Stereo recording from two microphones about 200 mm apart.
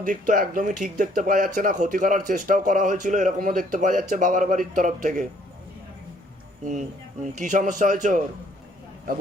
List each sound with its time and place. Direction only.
0.0 s speech: 40° right (ahead or behind)
7.3 s speech: 40° right (ahead or behind)